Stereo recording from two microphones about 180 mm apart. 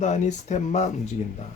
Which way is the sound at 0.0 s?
40° left (ahead or behind).